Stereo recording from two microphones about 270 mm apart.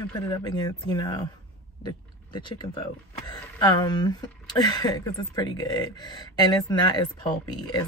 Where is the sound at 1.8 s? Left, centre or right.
Centre.